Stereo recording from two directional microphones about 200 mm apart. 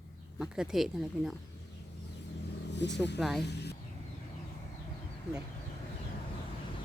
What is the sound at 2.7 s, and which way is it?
Speech, 60° left (ahead or behind).